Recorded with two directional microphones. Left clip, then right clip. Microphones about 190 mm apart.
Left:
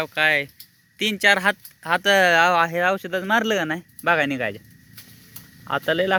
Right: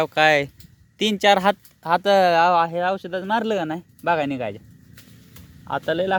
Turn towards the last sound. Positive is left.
turn(degrees=10)  # may be behind; listen again after turning